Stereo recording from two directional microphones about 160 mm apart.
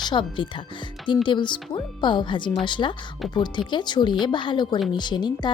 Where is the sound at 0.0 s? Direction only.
30° left (ahead or behind).